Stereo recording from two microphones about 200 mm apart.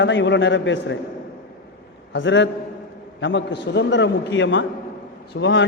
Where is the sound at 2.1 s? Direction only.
65° left (ahead or behind).